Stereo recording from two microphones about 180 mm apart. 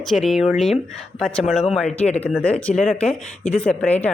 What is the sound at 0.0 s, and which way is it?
A woman's voice, centre (ahead or behind).